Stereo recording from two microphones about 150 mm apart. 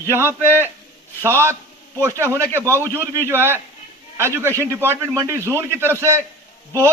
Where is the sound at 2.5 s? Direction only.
15° right (ahead or behind).